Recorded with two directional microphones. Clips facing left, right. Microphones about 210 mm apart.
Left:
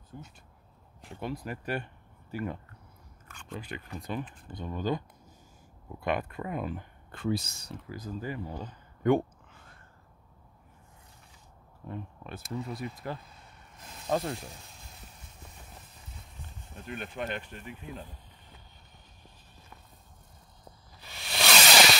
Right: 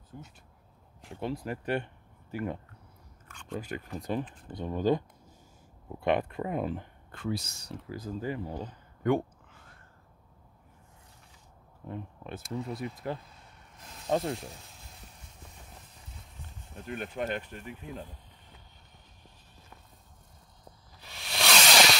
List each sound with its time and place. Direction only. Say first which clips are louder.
1.2 s speech: right 2 dB; 30° right (ahead or behind)
3.3 s a sound: right 2 dB; 5° left (ahead or behind)
3.5 s speech: right 3 dB; 45° right (ahead or behind); by 6.9 s 30° right (ahead or behind)
7.1 s speech: left 3 dB; 25° left (ahead or behind)
7.9 s speech: right 2 dB; 25° right (ahead or behind)
11.9 s speech: right 1 dB; 20° right (ahead or behind)
13.7 s snake: left 1 dB; 5° left (ahead or behind)
14.0 s speech: right 1 dB; 20° right (ahead or behind)
14.4 s a sound: right 1 dB; centre (ahead or behind)
16.8 s speech: right 2 dB; 40° right (ahead or behind)
21.0 s a sound: left 1 dB; centre (ahead or behind)